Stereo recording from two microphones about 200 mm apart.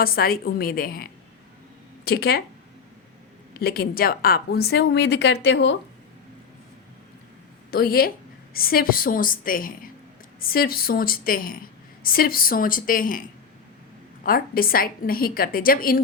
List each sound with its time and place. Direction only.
0.0 s a woman's voice: 50° left (ahead or behind)
3.6 s a woman's voice: 50° left (ahead or behind)
7.7 s a woman's voice: 50° left (ahead or behind)
14.3 s a woman's voice: 45° left (ahead or behind)